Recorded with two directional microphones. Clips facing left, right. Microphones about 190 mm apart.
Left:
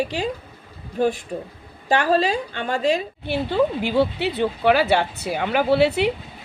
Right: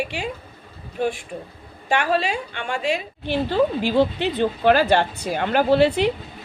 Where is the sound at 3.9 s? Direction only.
5° left (ahead or behind).